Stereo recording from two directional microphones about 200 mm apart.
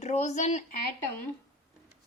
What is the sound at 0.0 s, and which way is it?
Speech, 35° left (ahead or behind).